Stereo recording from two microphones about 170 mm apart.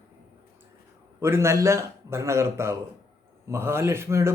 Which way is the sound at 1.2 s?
15° right (ahead or behind).